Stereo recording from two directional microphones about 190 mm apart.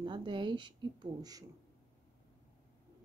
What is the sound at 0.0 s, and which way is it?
A woman's voice, 25° right (ahead or behind).